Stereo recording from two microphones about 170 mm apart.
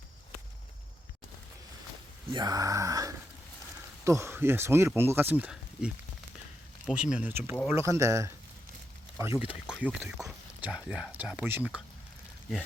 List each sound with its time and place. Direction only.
2.3 s speech: 25° right (ahead or behind)